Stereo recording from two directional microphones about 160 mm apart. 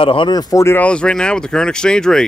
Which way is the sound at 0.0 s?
30° left (ahead or behind).